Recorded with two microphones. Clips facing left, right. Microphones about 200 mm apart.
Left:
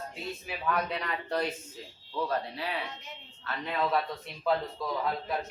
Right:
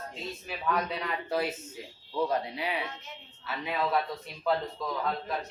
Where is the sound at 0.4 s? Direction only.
Centre (ahead or behind).